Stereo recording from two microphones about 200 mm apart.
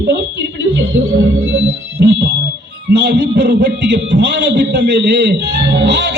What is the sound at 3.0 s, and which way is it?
A man's voice, 55° right (ahead or behind).